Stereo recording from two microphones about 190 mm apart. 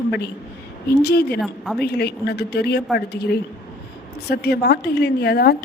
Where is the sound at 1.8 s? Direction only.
60° left (ahead or behind).